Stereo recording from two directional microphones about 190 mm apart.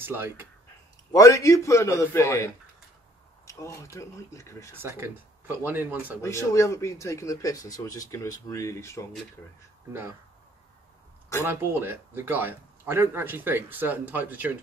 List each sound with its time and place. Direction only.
0.0 s speech: 10° right (ahead or behind)
1.1 s speech: 15° left (ahead or behind)
4.7 s speech: 10° right (ahead or behind)
6.2 s speech: 15° left (ahead or behind)
11.4 s speech: 10° right (ahead or behind)